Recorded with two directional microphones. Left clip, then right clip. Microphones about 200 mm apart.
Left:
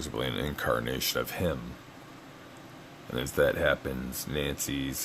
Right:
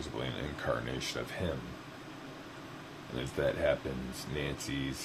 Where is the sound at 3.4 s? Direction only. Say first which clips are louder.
Left 5 dB; 55° left (ahead or behind).